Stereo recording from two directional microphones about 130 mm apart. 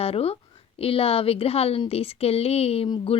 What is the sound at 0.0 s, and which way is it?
A woman's voice, 50° left (ahead or behind).